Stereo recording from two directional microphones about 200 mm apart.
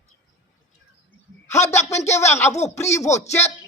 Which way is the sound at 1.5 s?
15° left (ahead or behind).